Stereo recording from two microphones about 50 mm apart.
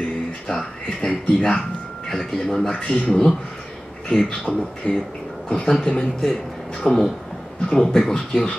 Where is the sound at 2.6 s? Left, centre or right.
Centre.